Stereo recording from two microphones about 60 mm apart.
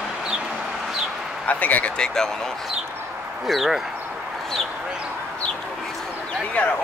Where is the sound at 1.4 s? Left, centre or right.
Left.